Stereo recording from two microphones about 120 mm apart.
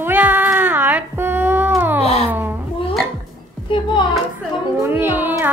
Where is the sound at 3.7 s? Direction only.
40° left (ahead or behind).